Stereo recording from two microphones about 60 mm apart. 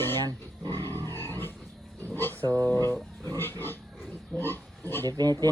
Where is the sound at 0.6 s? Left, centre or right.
Left.